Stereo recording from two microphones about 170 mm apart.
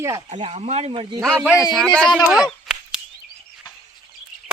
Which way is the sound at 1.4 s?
10° right (ahead or behind).